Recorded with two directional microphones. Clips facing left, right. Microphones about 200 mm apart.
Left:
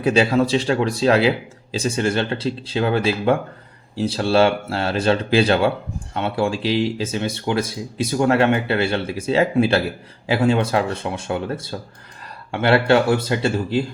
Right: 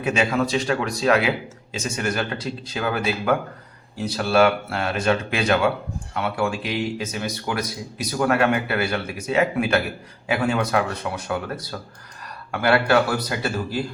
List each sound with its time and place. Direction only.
0.0 s speech: 35° left (ahead or behind)